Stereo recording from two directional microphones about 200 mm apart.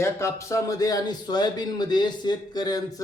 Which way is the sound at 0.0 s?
15° left (ahead or behind).